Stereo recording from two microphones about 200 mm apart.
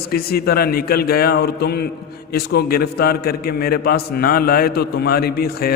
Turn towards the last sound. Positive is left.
turn(degrees=50)  # may be behind; listen again after turning